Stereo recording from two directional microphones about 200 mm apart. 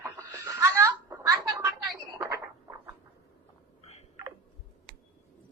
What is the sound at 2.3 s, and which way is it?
Rodents, 20° right (ahead or behind).